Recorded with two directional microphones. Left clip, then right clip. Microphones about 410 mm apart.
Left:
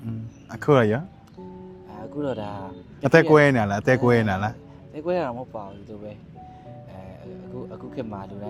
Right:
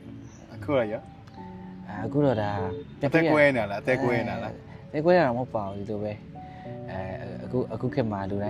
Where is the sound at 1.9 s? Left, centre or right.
Right.